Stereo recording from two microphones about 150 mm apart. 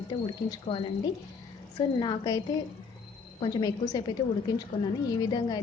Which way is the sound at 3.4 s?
25° left (ahead or behind).